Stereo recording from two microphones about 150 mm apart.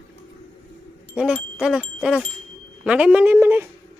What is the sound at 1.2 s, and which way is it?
Wind chime, 5° right (ahead or behind).